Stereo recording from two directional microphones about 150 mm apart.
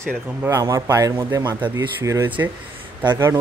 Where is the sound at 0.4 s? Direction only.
20° right (ahead or behind).